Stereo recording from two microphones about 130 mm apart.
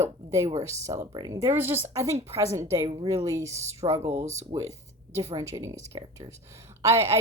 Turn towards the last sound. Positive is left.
turn(degrees=-20)  # may be behind; listen again after turning